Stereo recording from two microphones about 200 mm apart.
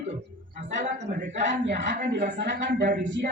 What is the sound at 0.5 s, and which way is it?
Speech, 40° right (ahead or behind).